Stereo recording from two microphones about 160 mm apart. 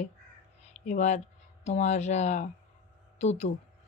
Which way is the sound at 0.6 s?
50° left (ahead or behind).